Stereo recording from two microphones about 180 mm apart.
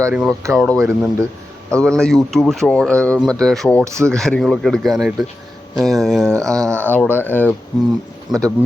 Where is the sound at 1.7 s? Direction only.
5° left (ahead or behind).